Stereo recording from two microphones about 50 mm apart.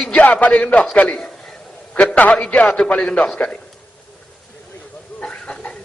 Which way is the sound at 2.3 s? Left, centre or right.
Left.